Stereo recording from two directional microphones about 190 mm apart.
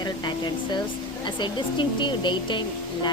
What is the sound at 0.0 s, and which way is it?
A woman's voice, 25° left (ahead or behind).